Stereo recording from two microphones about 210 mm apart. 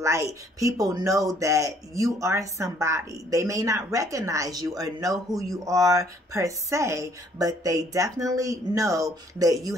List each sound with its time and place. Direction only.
0.0 s speech: 15° right (ahead or behind)